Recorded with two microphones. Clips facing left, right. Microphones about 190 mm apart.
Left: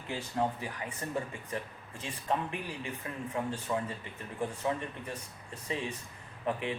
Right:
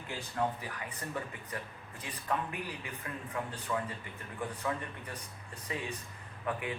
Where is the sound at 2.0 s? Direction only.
25° left (ahead or behind).